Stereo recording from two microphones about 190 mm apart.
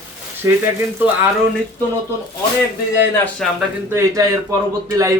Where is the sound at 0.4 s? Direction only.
15° right (ahead or behind).